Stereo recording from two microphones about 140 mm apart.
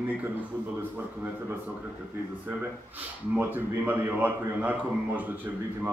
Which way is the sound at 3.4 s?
15° right (ahead or behind).